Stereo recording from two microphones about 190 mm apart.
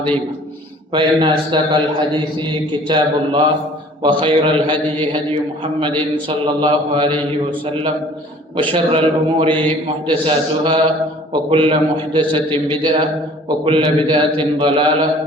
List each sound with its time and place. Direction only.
0.9 s a man's voice: 25° right (ahead or behind)